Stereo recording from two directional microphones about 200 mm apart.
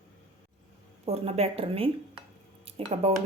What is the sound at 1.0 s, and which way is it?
A woman's voice, 30° right (ahead or behind).